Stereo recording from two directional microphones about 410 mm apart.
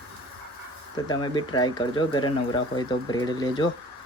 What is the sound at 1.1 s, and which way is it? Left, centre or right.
Speech, centre.